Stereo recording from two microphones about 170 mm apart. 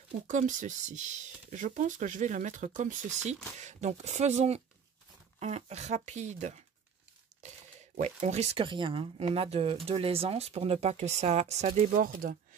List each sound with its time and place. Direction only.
0.3 s speech: 50° right (ahead or behind)